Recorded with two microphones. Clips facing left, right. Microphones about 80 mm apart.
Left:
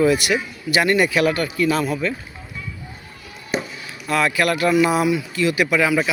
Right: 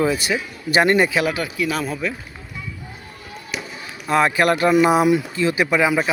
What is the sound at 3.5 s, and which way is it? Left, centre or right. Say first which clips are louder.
Chop: left 7 dB; left.